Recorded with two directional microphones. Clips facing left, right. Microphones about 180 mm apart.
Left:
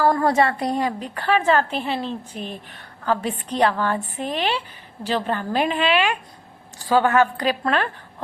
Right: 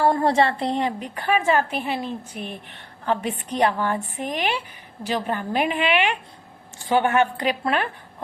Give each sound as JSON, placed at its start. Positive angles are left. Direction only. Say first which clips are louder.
{"t": 0.0, "sound": "a woman's voice", "louder": "left 1 dB", "side_deg": -25}